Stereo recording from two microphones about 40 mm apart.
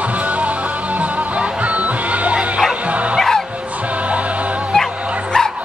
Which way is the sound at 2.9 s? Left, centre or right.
Right.